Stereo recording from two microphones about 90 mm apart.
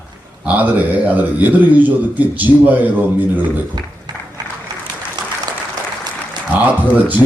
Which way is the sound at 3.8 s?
50° right (ahead or behind).